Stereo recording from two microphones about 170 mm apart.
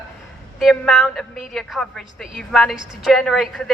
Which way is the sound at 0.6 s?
Centre (ahead or behind).